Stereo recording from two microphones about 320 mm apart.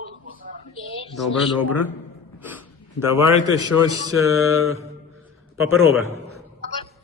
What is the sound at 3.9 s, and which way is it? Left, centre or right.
Mantra, left.